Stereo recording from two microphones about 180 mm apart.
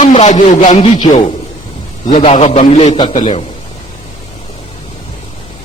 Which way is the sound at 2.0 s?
35° left (ahead or behind).